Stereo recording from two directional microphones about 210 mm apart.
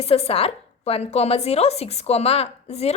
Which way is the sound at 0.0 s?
30° left (ahead or behind).